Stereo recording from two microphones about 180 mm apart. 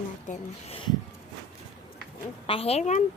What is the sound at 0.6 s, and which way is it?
Speech, 30° left (ahead or behind).